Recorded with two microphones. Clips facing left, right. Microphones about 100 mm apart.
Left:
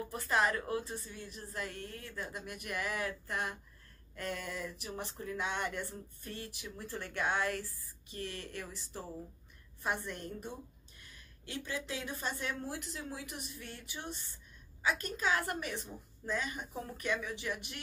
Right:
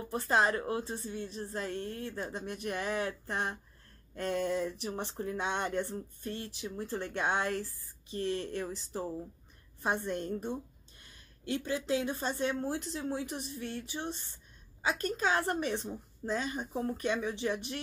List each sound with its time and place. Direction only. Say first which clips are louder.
0.1 s a woman's voice: right 4 dB; 30° right (ahead or behind)